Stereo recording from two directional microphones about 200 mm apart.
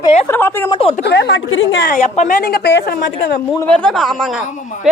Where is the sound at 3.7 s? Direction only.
5° left (ahead or behind).